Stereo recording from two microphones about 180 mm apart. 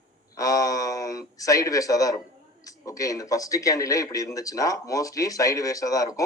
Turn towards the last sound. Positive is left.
turn(degrees=20)  # may be behind; listen again after turning